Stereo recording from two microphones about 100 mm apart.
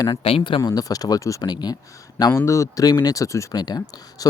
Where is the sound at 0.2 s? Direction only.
70° left (ahead or behind).